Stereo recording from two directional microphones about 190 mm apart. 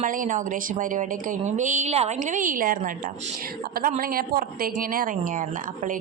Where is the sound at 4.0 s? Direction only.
50° right (ahead or behind).